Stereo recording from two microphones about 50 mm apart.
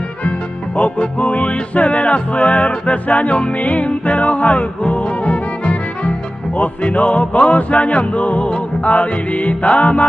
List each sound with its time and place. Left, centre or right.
0.7 s music: left